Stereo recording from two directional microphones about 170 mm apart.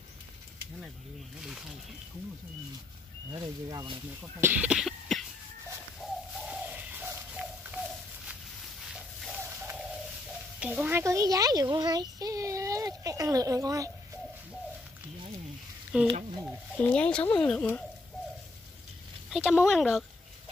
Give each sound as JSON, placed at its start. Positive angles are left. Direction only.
{"t": 3.3, "sound": "speech", "side_deg": -25}
{"t": 4.4, "sound": "cough", "side_deg": -10}
{"t": 6.3, "sound": "bird", "side_deg": -5}
{"t": 8.9, "sound": "a sound", "side_deg": -5}
{"t": 10.6, "sound": "a child's voice", "side_deg": -10}
{"t": 15.9, "sound": "speech", "side_deg": -5}
{"t": 16.7, "sound": "speech", "side_deg": 5}
{"t": 19.3, "sound": "speech", "side_deg": -5}